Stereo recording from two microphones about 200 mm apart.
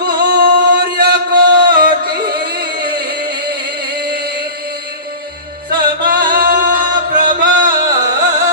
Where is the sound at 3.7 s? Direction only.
50° right (ahead or behind).